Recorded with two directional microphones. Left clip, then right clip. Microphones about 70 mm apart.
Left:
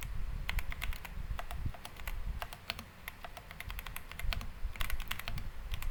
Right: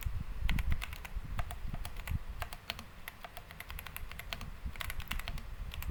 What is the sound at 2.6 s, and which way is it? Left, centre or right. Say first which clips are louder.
Computer keyboard: left 1 dB; centre.